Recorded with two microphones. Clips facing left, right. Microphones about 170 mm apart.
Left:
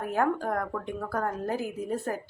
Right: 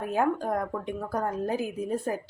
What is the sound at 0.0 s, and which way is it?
Speech, 15° right (ahead or behind).